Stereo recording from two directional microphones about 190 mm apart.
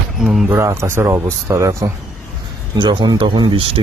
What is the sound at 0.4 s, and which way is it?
Speech, 15° right (ahead or behind).